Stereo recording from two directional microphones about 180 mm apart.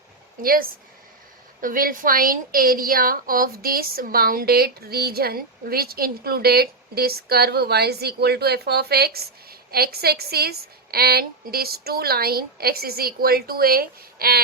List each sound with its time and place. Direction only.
0.4 s a woman's voice: 55° right (ahead or behind)